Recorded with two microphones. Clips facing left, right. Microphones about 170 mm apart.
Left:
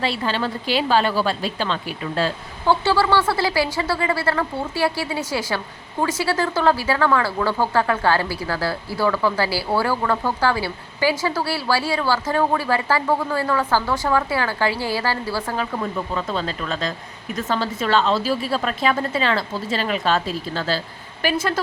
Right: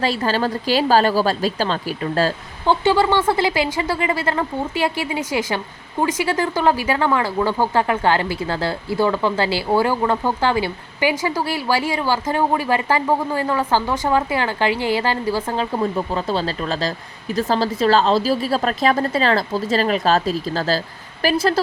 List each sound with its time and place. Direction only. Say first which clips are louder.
0.0 s a woman's voice: right 3 dB; 40° right (ahead or behind)
2.6 s a woman's voice: right 2 dB; 20° right (ahead or behind); by 21.6 s 35° right (ahead or behind)